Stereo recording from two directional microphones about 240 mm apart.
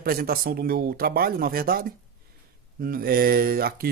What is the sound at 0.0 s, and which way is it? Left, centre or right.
Speech, right.